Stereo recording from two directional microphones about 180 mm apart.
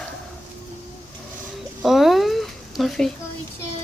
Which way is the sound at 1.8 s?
Centre (ahead or behind).